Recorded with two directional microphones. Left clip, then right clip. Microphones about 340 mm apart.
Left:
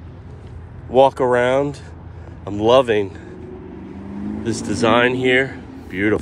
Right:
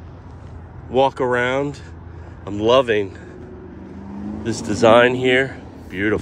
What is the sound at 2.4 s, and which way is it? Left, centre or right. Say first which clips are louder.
Speech: left 1 dB; right.